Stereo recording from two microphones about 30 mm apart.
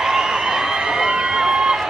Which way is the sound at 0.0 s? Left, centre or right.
Centre.